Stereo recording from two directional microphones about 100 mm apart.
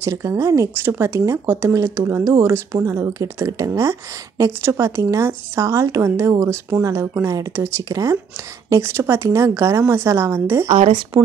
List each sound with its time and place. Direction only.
0.0 s speech: 30° right (ahead or behind)